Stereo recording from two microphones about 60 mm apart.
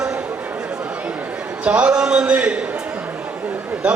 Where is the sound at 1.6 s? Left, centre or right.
Centre.